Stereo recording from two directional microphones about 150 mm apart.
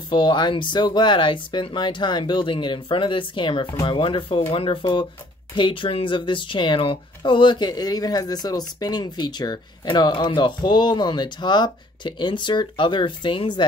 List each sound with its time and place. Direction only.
0.1 s speech: 30° left (ahead or behind)